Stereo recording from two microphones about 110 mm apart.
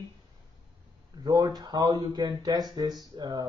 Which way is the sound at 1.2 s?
35° right (ahead or behind).